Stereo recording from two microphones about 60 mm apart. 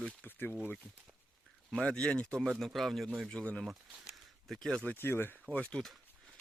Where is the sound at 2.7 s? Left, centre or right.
Centre.